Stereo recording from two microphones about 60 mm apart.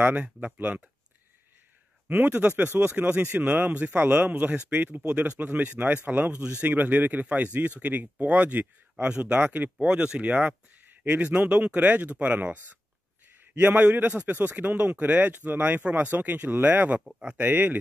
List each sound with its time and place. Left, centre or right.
0.0 s speech: right
2.0 s speech: right
3.9 s a man's voice: right
17.0 s speech: centre
17.4 s speech: right